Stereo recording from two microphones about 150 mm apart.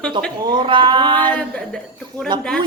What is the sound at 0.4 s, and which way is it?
Speech, 30° right (ahead or behind).